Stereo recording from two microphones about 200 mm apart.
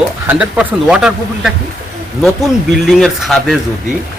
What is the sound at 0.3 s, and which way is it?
Speech, 5° right (ahead or behind).